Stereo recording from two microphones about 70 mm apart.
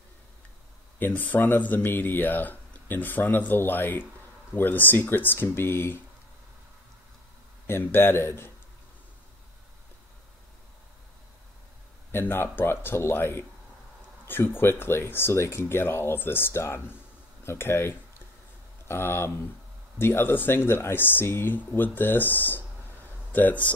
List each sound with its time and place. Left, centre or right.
0.9 s speech: left
7.6 s speech: left
12.1 s speech: left